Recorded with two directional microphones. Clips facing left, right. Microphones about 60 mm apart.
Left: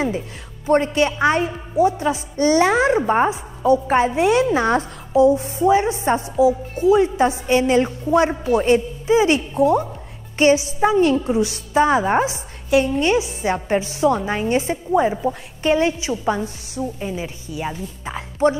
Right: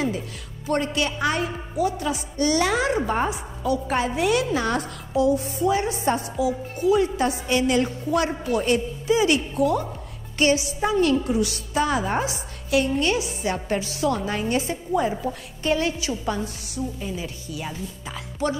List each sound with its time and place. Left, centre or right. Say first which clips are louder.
0.7 s a woman's voice: left 7 dB; left